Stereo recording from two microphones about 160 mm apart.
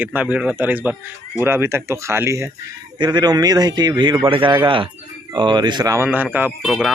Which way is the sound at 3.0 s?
25° right (ahead or behind).